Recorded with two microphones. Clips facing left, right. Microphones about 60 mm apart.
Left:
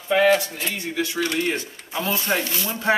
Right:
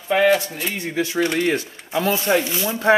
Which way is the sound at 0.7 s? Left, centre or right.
Right.